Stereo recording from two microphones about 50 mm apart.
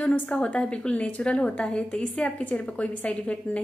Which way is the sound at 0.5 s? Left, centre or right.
Left.